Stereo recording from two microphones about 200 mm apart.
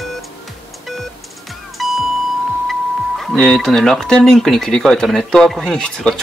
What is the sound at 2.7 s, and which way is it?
Speech, centre (ahead or behind).